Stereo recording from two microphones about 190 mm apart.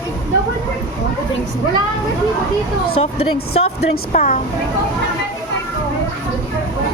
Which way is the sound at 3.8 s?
50° left (ahead or behind).